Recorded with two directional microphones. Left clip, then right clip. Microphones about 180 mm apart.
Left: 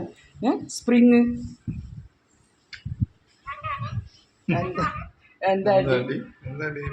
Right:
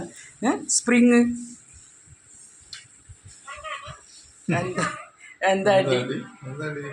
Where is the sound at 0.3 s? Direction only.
10° left (ahead or behind).